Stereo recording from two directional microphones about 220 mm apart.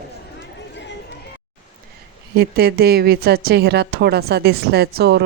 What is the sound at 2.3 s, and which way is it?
Speech, 45° right (ahead or behind).